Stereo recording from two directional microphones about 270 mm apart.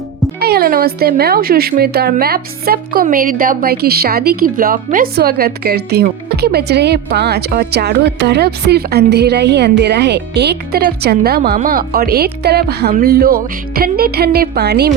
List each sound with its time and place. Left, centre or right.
0.3 s speech: right